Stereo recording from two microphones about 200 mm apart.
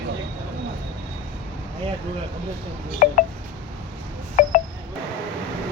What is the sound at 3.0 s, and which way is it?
Telephone dialing, 40° left (ahead or behind).